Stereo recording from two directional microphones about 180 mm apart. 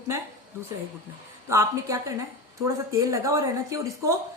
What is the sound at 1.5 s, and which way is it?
A woman's voice, 20° right (ahead or behind).